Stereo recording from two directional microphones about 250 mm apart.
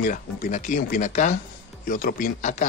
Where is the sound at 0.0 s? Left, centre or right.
Left.